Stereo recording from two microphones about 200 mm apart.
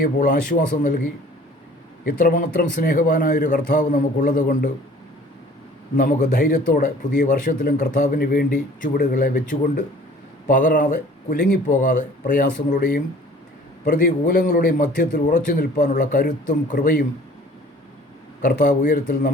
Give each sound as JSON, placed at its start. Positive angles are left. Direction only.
{"t": 0.0, "sound": "speech", "side_deg": 45}
{"t": 2.0, "sound": "a man's voice", "side_deg": 45}
{"t": 6.0, "sound": "a man's voice", "side_deg": 45}
{"t": 18.4, "sound": "speech", "side_deg": 40}